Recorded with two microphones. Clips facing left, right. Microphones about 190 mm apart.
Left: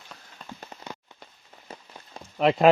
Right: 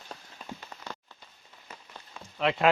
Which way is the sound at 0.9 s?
20° left (ahead or behind).